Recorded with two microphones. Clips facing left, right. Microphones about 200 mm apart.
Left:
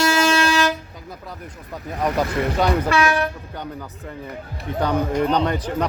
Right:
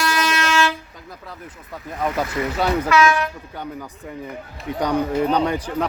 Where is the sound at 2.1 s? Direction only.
5° right (ahead or behind).